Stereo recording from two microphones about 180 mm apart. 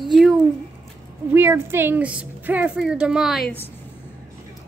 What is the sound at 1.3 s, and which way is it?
A woman's voice, 15° right (ahead or behind).